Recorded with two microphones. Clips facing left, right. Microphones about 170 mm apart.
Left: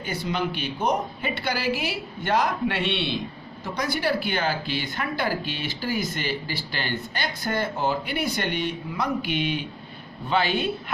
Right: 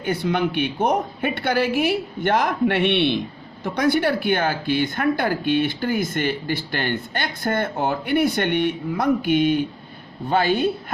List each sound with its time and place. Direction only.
0.0 s a woman's voice: 55° right (ahead or behind)